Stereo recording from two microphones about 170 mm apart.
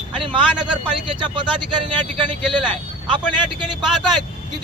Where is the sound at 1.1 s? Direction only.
30° right (ahead or behind).